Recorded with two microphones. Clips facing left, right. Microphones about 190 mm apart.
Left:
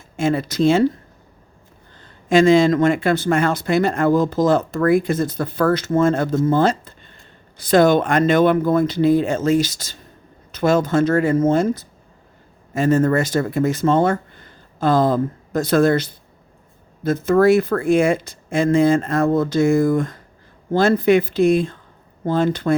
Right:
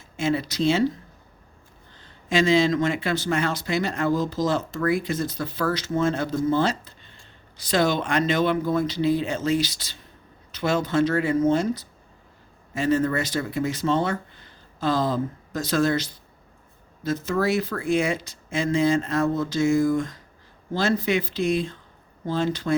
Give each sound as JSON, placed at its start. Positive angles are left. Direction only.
{"t": 0.2, "sound": "speech", "side_deg": 50}
{"t": 2.3, "sound": "speech", "side_deg": 50}